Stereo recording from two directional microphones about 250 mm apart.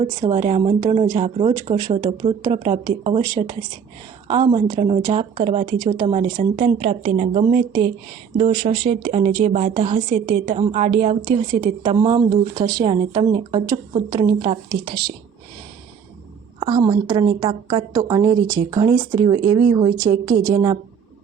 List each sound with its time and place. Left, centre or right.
0.0 s a woman's voice: centre
16.6 s a woman's voice: centre